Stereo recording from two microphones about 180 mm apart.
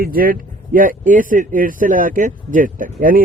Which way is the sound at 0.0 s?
55° right (ahead or behind).